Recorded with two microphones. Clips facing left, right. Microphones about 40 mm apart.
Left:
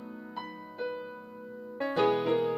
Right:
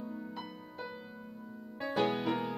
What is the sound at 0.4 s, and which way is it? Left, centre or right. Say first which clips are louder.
Music: left 6 dB; left.